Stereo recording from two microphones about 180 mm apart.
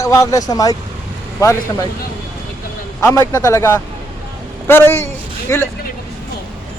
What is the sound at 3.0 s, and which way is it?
Speech, 15° left (ahead or behind).